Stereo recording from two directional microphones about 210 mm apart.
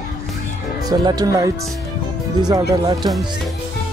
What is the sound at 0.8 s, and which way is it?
Speech, 20° right (ahead or behind).